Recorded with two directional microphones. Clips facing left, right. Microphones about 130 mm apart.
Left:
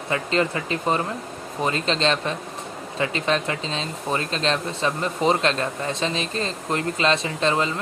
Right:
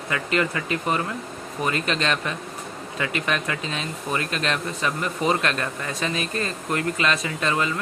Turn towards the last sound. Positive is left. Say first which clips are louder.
# left 2 dB
turn(degrees=25)  # may be behind; listen again after turning